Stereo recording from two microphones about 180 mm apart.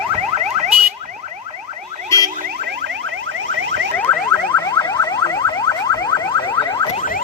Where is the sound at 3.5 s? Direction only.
90° right.